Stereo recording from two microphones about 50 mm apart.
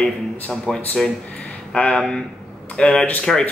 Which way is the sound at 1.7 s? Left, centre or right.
Centre.